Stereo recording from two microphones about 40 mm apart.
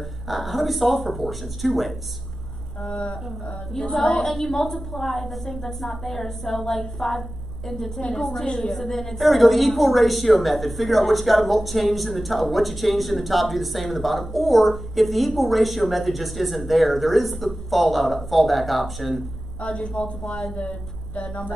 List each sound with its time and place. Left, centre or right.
0.3 s a woman's voice: centre
2.8 s a woman's voice: left
3.7 s a woman's voice: centre
8.0 s a woman's voice: centre
19.6 s a woman's voice: left